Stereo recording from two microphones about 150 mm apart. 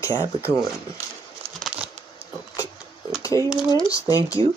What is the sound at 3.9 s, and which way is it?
Speech, 20° left (ahead or behind).